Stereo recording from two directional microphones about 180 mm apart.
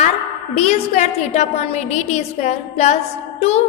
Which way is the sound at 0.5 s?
35° left (ahead or behind).